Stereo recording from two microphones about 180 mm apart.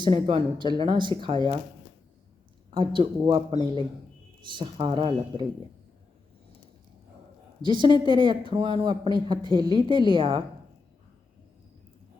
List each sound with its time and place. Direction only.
0.0 s speech: 30° right (ahead or behind)
2.6 s speech: 25° right (ahead or behind)
7.6 s speech: 25° right (ahead or behind)